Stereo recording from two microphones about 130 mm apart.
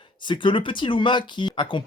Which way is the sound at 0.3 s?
40° left (ahead or behind).